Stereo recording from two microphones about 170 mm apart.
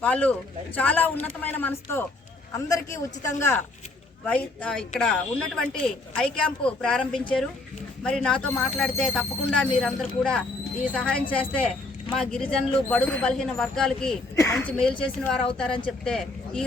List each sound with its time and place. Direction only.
0.0 s a man's voice: 10° left (ahead or behind)
14.3 s speech: 15° left (ahead or behind)